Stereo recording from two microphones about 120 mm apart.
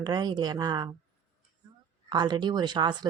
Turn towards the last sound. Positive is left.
turn(degrees=-35)  # may be behind; listen again after turning